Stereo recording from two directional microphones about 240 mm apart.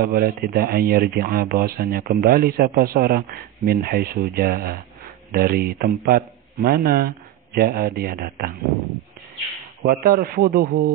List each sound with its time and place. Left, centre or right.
0.0 s speech: right
9.8 s speech: right